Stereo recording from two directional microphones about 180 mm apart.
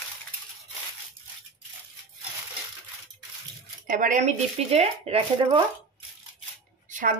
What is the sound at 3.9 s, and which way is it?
Speech, 45° right (ahead or behind).